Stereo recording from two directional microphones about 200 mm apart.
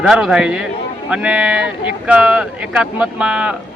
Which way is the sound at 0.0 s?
5° right (ahead or behind).